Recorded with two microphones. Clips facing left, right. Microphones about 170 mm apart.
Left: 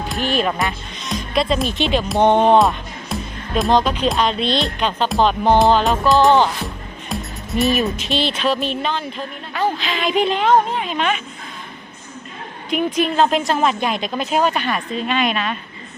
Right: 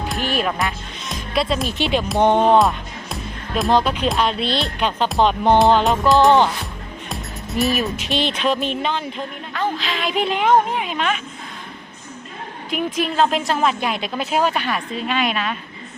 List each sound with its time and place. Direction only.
0.1 s speech: 5° right (ahead or behind)
2.2 s speech: 20° left (ahead or behind)
2.6 s music: centre (ahead or behind)
3.8 s speech: 10° right (ahead or behind)
5.4 s speech: 5° left (ahead or behind)
7.1 s music: centre (ahead or behind)
8.0 s speech: 15° right (ahead or behind)
9.5 s a woman's voice: 5° left (ahead or behind); by 10.9 s 10° right (ahead or behind)
10.9 s speech: centre (ahead or behind)
12.7 s speech: centre (ahead or behind)